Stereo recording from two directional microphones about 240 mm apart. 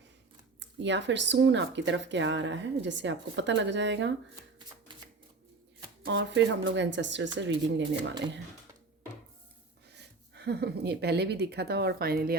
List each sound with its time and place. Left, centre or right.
0.6 s speech: right
6.1 s speech: right
9.9 s speech: right